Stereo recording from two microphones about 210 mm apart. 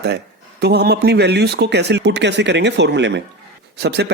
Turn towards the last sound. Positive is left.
turn(degrees=-55)  # may be behind; listen again after turning